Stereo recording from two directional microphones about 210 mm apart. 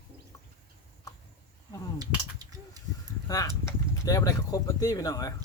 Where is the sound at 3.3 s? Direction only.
15° left (ahead or behind).